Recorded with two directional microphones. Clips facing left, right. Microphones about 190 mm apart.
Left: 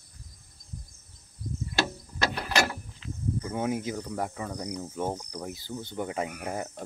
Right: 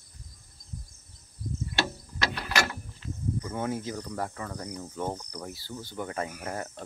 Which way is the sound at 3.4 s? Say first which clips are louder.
Left 3 dB; 15° left (ahead or behind).